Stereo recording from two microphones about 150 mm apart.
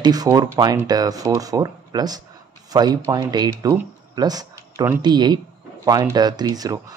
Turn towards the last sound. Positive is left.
turn(degrees=-25)  # may be behind; listen again after turning